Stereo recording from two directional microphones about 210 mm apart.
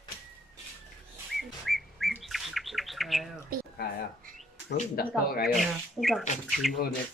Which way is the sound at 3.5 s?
45° right (ahead or behind).